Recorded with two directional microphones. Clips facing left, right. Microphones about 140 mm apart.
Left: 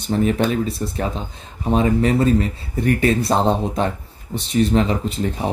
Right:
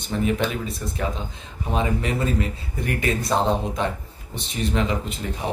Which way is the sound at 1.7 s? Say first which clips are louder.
Left 7 dB; 40° left (ahead or behind).